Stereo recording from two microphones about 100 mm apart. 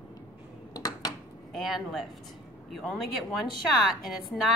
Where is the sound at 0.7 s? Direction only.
40° left (ahead or behind).